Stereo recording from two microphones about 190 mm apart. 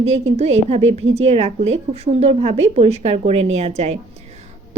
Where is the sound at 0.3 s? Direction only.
35° right (ahead or behind).